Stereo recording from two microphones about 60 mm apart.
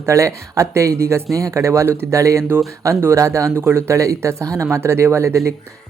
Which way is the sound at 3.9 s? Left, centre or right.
Right.